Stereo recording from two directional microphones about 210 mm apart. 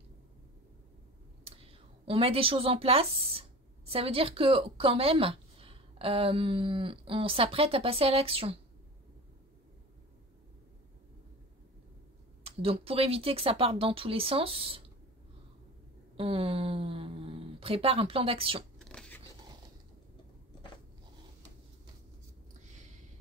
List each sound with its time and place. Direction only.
1.4 s a woman's voice: 30° right (ahead or behind)
12.4 s speech: 25° right (ahead or behind)
16.2 s speech: 25° right (ahead or behind)
18.9 s scissors: 5° left (ahead or behind)